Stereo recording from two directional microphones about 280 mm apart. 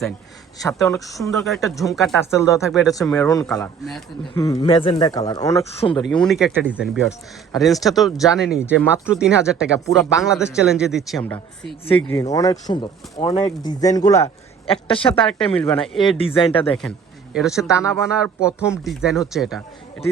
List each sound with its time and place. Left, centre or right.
0.6 s speech: centre
1.5 s speech: centre
6.1 s speech: centre
15.0 s speech: centre
16.0 s speech: centre
17.3 s speech: centre